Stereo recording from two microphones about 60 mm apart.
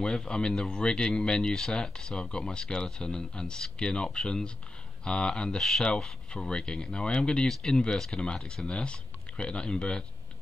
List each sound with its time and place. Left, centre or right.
0.0 s speech: centre